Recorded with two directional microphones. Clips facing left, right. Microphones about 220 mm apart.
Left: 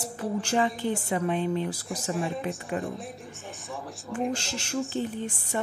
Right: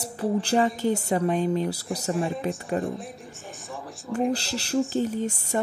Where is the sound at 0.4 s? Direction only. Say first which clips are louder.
Right 2 dB; 35° right (ahead or behind).